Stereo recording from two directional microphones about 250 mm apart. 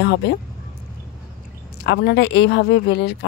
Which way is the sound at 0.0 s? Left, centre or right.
Left.